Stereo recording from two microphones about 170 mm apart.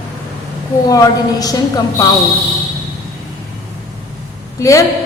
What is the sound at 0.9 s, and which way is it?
A woman's voice, 20° left (ahead or behind).